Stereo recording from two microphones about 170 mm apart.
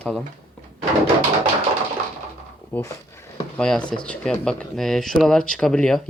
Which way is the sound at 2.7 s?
15° left (ahead or behind).